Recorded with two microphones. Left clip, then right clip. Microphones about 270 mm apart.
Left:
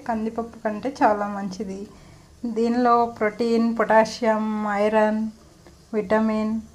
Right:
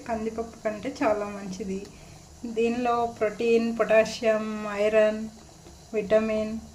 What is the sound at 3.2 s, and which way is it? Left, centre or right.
A woman's voice, centre.